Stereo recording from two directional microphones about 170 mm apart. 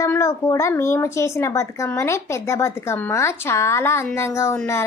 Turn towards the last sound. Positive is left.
turn(degrees=15)  # may be behind; listen again after turning